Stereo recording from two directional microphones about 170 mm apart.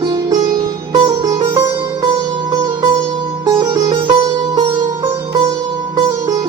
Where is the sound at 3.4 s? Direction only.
30° right (ahead or behind).